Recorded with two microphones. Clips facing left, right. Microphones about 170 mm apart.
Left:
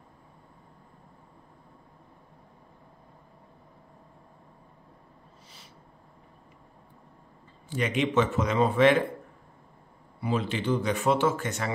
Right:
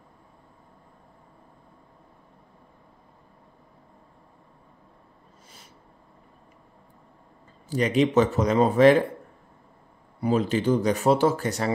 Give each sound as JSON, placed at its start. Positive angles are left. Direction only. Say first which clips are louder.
{"t": 7.7, "sound": "speech", "louder": "right 5 dB", "side_deg": -35}
{"t": 10.2, "sound": "speech", "louder": "right 6 dB", "side_deg": -40}